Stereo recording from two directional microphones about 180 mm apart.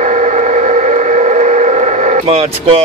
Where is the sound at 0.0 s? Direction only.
40° right (ahead or behind).